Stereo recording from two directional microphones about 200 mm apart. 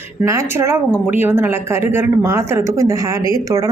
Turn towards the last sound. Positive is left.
turn(degrees=-15)  # may be behind; listen again after turning